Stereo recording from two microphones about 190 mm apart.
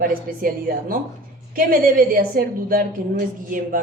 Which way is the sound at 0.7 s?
50° right (ahead or behind).